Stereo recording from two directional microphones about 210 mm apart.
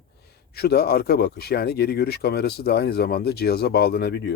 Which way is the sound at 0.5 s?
50° left (ahead or behind).